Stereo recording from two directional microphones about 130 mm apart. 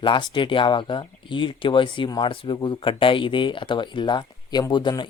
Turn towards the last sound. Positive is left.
turn(degrees=35)  # may be behind; listen again after turning